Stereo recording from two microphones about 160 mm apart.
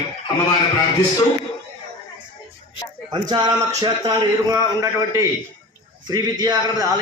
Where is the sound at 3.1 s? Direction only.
25° right (ahead or behind).